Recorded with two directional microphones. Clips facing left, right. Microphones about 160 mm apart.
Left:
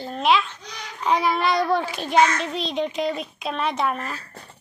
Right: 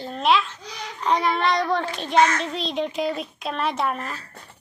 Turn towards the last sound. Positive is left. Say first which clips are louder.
# left 1 dB
turn(degrees=0)  # may be behind; listen again after turning